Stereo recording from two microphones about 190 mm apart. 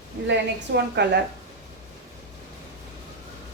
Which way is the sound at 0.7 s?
60° right (ahead or behind).